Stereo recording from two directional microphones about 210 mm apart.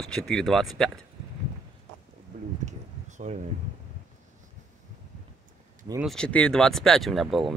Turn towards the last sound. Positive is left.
turn(degrees=0)  # may be behind; listen again after turning